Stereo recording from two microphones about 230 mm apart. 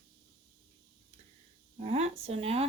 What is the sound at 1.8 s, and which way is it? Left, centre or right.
Speech, right.